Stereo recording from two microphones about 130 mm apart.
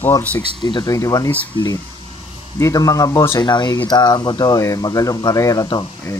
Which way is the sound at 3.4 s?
35° left (ahead or behind).